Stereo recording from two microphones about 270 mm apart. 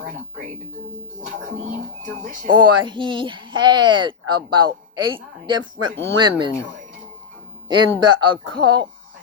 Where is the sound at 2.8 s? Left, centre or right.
Centre.